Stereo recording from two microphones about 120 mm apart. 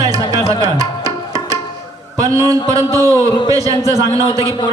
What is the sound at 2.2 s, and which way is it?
Speech, 30° right (ahead or behind).